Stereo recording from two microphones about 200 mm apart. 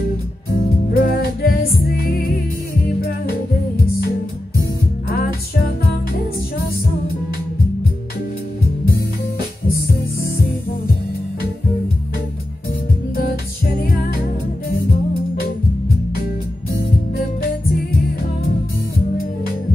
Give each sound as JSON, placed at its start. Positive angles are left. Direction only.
{"t": 0.9, "sound": "music", "side_deg": 50}